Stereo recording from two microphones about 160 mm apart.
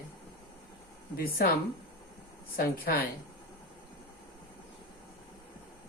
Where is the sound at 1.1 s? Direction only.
70° left (ahead or behind).